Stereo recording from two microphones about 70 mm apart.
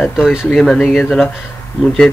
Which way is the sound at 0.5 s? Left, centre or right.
Centre.